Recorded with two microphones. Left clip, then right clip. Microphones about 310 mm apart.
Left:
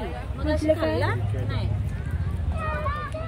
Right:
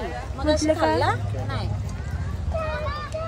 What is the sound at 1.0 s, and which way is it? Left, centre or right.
Speech, centre.